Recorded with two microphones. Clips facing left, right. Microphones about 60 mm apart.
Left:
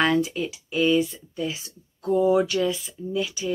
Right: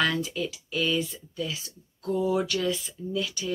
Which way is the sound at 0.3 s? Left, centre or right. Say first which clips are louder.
Left 2 dB; left.